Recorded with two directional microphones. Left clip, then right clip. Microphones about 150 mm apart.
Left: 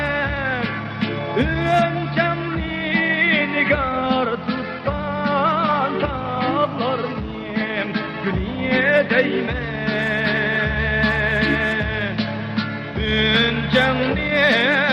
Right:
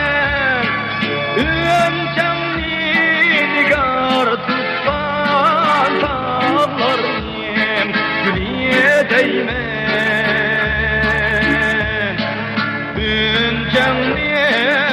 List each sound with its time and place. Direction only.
0.1 s music: 35° right (ahead or behind)
2.9 s music: 40° right (ahead or behind)
8.7 s music: 50° right (ahead or behind)
13.1 s music: 45° right (ahead or behind)